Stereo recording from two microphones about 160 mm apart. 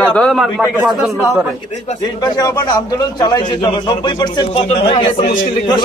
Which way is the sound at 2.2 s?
25° left (ahead or behind).